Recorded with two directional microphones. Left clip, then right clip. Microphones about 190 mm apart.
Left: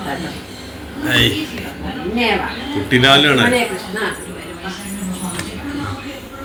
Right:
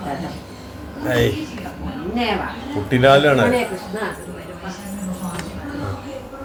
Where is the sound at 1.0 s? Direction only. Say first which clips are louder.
Left 4 dB; 35° right (ahead or behind).